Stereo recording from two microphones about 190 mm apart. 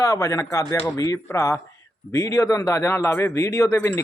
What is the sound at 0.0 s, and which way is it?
A man's voice, 15° left (ahead or behind).